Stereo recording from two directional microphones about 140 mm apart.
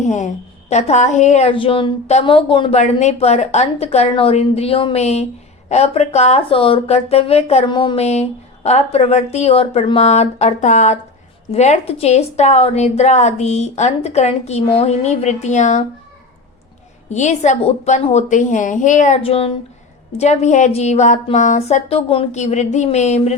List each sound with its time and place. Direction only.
0.0 s a woman's voice: 60° left (ahead or behind)
1.5 s speech: 40° left (ahead or behind)
7.6 s speech: 35° left (ahead or behind)
7.9 s speech: 50° left (ahead or behind)
17.1 s a woman's voice: 60° left (ahead or behind)
19.2 s speech: 45° left (ahead or behind)
22.3 s a woman's voice: 55° left (ahead or behind)